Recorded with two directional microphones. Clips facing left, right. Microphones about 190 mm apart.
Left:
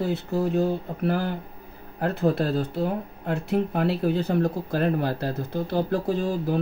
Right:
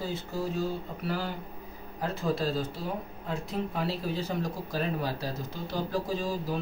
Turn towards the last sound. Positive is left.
turn(degrees=60)  # may be behind; listen again after turning